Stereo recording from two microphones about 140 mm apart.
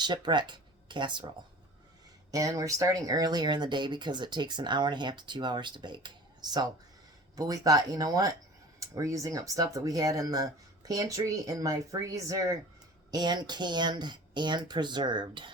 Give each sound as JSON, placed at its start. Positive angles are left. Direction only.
{"t": 0.0, "sound": "speech", "side_deg": -30}
{"t": 2.3, "sound": "speech", "side_deg": -25}